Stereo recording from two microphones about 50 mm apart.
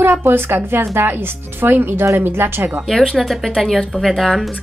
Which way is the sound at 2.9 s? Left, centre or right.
Centre.